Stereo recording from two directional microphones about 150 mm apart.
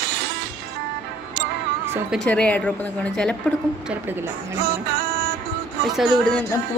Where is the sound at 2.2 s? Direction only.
10° left (ahead or behind).